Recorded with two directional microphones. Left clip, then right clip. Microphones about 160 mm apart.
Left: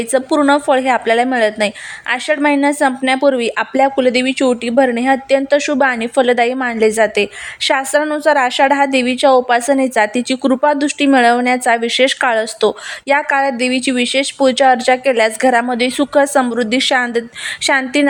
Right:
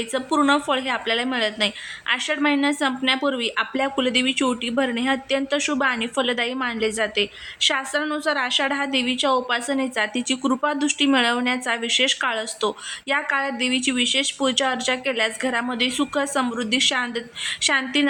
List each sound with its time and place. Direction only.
0.1 s a woman's voice: 30° left (ahead or behind)